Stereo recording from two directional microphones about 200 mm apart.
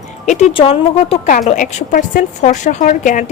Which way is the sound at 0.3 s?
35° left (ahead or behind).